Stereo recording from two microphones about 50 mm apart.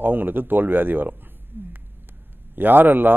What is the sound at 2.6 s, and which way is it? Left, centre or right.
Speech, right.